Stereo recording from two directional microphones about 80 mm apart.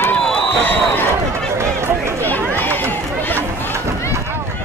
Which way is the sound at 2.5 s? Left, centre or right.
Left.